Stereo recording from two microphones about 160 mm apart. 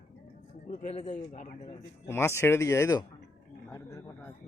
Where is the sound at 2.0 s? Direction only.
15° left (ahead or behind).